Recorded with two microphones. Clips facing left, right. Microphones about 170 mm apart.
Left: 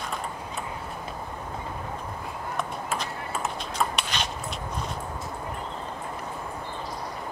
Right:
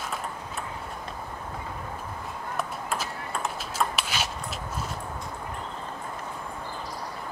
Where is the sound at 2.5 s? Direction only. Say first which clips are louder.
Even; centre (ahead or behind).